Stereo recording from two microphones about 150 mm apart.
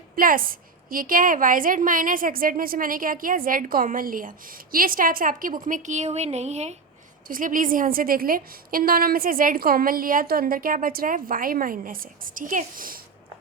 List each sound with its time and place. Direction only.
0.2 s a woman's voice: 70° right (ahead or behind); by 6.7 s 45° right (ahead or behind)
7.3 s a woman's voice: 65° right (ahead or behind)